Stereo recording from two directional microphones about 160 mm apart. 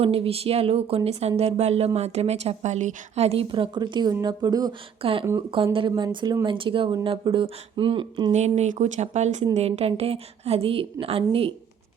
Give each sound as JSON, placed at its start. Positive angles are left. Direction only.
{"t": 0.0, "sound": "a woman's voice", "side_deg": -40}
{"t": 5.0, "sound": "a woman's voice", "side_deg": -35}
{"t": 8.3, "sound": "a woman's voice", "side_deg": -45}